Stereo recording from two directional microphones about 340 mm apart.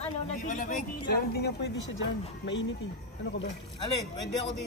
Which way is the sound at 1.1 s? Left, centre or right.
Left.